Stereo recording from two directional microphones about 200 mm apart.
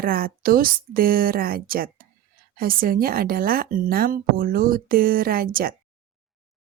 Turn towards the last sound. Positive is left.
turn(degrees=-45)  # may be behind; listen again after turning